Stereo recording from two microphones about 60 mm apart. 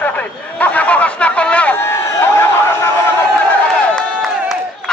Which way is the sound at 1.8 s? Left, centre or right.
Left.